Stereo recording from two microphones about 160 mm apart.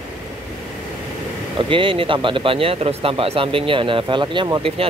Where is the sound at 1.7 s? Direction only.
30° right (ahead or behind).